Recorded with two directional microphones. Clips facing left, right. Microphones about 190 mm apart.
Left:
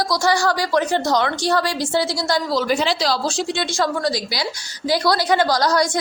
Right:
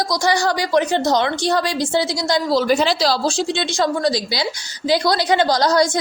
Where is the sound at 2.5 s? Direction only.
35° right (ahead or behind).